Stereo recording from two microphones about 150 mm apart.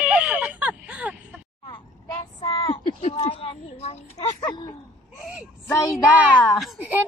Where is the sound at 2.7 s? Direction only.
40° left (ahead or behind).